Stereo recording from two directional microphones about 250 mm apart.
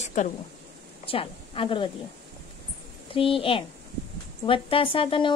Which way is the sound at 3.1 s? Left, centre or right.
Left.